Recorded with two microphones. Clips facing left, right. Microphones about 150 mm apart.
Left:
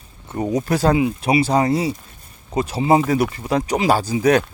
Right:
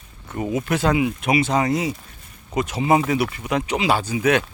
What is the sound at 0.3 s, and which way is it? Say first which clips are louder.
Speech: left 3 dB; 35° left (ahead or behind).